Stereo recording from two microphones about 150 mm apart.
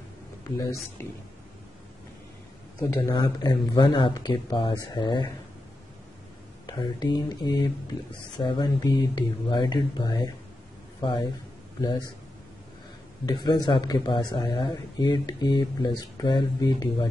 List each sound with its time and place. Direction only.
1.0 s speech: 15° left (ahead or behind)
2.8 s speech: 15° left (ahead or behind)
3.2 s speech: 30° left (ahead or behind)
6.6 s speech: 30° left (ahead or behind)
13.2 s speech: 30° left (ahead or behind)